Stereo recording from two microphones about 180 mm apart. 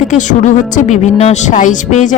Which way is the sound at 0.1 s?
45° left (ahead or behind).